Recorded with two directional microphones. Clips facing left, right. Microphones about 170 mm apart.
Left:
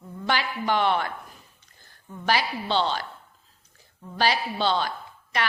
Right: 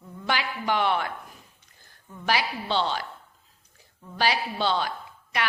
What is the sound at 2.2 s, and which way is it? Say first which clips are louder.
Speech: left 1 dB; 5° right (ahead or behind).